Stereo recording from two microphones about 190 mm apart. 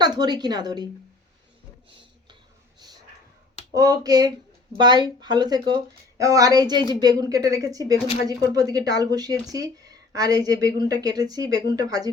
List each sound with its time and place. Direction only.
0.0 s speech: 20° right (ahead or behind)
3.8 s speech: 20° right (ahead or behind)
8.0 s speech: 35° left (ahead or behind)
8.3 s speech: 20° right (ahead or behind)